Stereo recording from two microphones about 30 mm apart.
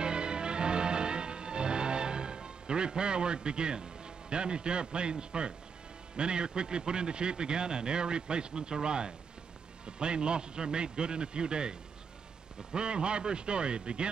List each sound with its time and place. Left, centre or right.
0.0 s music: right
6.1 s a man's voice: right
12.7 s a man's voice: right